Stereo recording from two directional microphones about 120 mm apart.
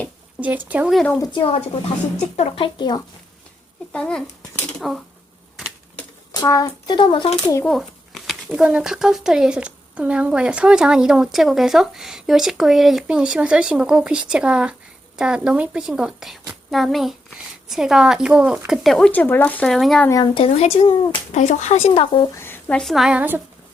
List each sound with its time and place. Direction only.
0.3 s a woman's voice: 10° right (ahead or behind)
1.3 s a child's voice: 40° left (ahead or behind)
1.5 s speech: 55° left (ahead or behind)
2.6 s a child's voice: 40° left (ahead or behind)
3.9 s speech: 5° left (ahead or behind)
6.3 s a child's voice: 30° left (ahead or behind)
7.6 s speech: centre (ahead or behind)
19.6 s speech: centre (ahead or behind)
20.1 s speech: 30° left (ahead or behind)
20.3 s speech: 55° left (ahead or behind)
21.3 s speech: 75° left (ahead or behind); by 22.3 s 50° left (ahead or behind)
22.4 s a sound: 20° left (ahead or behind)
22.8 s a woman's voice: centre (ahead or behind)